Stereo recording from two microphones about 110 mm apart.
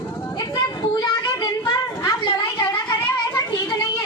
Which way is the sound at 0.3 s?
35° left (ahead or behind).